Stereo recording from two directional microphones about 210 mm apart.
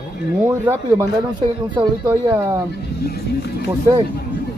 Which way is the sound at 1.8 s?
10° right (ahead or behind).